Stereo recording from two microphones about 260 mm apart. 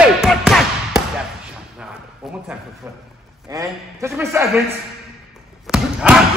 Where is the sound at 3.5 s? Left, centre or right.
Centre.